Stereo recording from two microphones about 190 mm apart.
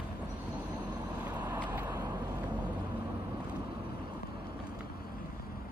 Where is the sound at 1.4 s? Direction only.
20° right (ahead or behind).